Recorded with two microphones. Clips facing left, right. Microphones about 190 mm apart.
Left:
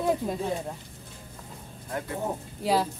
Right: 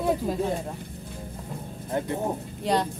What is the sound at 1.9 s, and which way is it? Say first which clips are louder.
Speech: right 5 dB; 25° right (ahead or behind).